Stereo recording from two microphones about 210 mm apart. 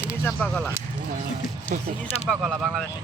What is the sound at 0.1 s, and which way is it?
Speech, 5° left (ahead or behind).